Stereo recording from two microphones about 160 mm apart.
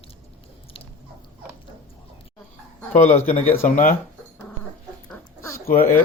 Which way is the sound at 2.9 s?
45° left (ahead or behind).